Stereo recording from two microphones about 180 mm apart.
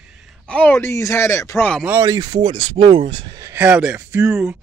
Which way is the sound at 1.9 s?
20° right (ahead or behind).